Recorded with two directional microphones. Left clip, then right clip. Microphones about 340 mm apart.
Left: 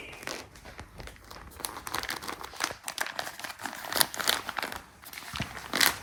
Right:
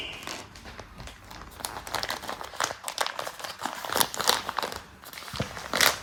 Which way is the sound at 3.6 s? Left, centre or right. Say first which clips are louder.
Right 2 dB; centre.